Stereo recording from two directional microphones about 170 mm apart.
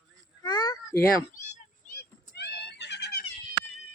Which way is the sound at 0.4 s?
25° left (ahead or behind).